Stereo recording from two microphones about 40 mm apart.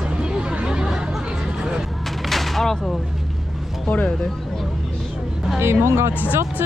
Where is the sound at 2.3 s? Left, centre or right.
Centre.